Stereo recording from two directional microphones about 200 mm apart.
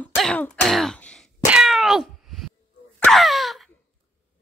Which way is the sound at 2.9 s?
5° left (ahead or behind).